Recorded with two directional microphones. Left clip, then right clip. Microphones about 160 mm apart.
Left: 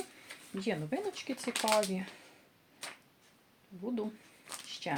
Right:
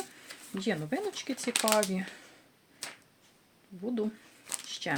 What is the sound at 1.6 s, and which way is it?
Speech, 45° right (ahead or behind).